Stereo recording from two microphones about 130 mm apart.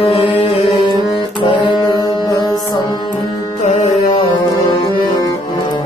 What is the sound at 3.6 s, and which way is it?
Music, 60° left (ahead or behind).